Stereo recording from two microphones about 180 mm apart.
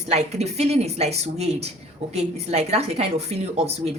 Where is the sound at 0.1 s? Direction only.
35° right (ahead or behind).